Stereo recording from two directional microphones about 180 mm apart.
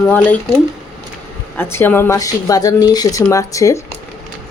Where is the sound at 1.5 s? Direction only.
15° left (ahead or behind).